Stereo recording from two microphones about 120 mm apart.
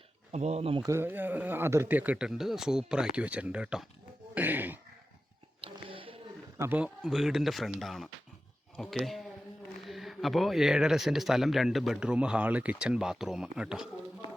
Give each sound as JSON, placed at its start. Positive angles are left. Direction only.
{"t": 0.3, "sound": "speech", "side_deg": -65}
{"t": 0.8, "sound": "speech", "side_deg": -25}
{"t": 5.5, "sound": "a sound", "side_deg": -50}
{"t": 6.6, "sound": "speech", "side_deg": -15}